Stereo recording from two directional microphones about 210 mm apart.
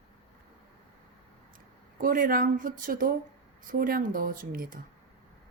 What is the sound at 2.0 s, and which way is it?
Speech, 40° right (ahead or behind).